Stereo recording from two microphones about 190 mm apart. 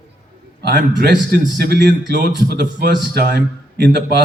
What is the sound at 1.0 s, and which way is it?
A man's voice, 55° right (ahead or behind).